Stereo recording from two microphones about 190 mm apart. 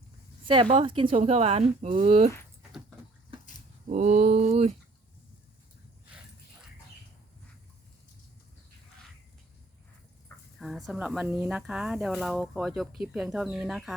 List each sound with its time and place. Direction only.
0.4 s speech: 30° right (ahead or behind)
3.8 s speech: 40° right (ahead or behind)
10.6 s speech: centre (ahead or behind)